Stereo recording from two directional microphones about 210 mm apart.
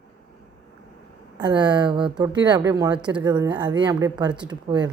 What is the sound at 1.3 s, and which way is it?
Speech, 20° right (ahead or behind).